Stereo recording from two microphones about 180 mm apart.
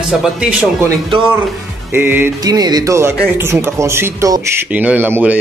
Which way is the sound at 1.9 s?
10° right (ahead or behind).